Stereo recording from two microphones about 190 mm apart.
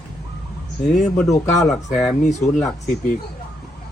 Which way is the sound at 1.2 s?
15° left (ahead or behind).